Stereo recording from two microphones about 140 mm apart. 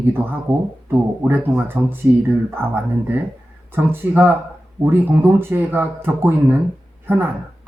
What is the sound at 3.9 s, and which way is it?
Speech, 15° right (ahead or behind).